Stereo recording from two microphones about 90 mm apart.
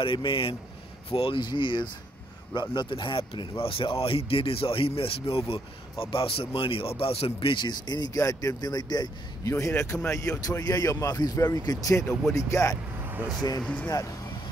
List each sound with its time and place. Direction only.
0.0 s speech: 75° left (ahead or behind); by 8.2 s 50° left (ahead or behind)
8.2 s speech: 35° left (ahead or behind)
9.5 s a man's voice: 30° left (ahead or behind)
13.0 s vehicle: 25° right (ahead or behind)
13.6 s speech: 10° left (ahead or behind)
13.8 s speech: 35° left (ahead or behind)